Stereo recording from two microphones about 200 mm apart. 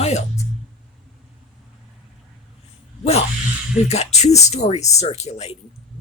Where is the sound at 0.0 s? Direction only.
35° left (ahead or behind).